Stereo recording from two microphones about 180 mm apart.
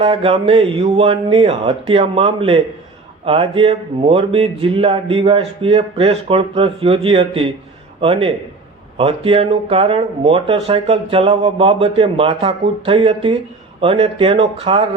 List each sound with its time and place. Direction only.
0.0 s speech: 30° right (ahead or behind)